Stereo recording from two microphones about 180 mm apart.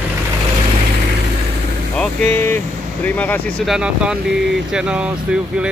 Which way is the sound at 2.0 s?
15° left (ahead or behind).